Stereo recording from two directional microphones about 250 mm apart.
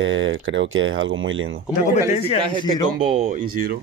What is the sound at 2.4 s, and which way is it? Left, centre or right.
Speech, centre.